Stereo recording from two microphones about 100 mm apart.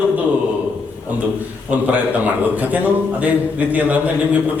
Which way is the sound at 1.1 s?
15° right (ahead or behind).